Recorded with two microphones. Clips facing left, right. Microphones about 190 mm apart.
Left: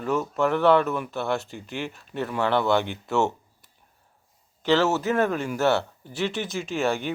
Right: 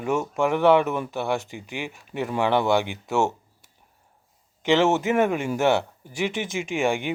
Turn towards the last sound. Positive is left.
turn(degrees=-15)  # may be behind; listen again after turning